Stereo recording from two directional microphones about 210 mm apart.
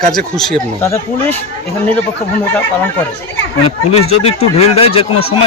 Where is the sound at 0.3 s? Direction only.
Centre (ahead or behind).